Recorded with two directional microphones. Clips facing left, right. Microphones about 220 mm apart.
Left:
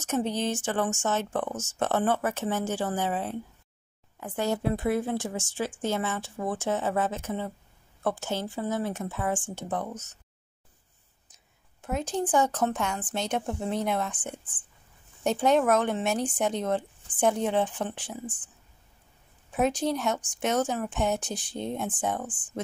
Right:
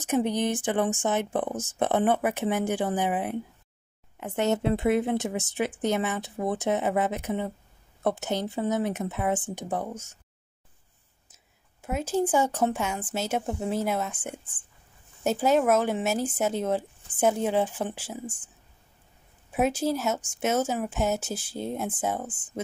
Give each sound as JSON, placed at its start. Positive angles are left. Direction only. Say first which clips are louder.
{"t": 0.0, "sound": "a woman's voice", "louder": "right 3 dB", "side_deg": -15}
{"t": 11.3, "sound": "a woman's voice", "louder": "even", "side_deg": -5}
{"t": 19.5, "sound": "a woman's voice", "louder": "right 1 dB", "side_deg": -10}